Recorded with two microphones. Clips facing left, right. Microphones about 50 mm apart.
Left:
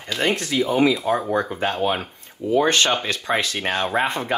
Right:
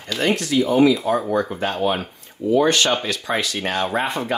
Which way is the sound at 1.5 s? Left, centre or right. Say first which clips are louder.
Right 1 dB; left.